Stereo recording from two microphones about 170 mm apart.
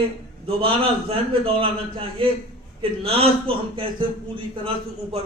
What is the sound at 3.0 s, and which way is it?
A man's voice, 35° right (ahead or behind).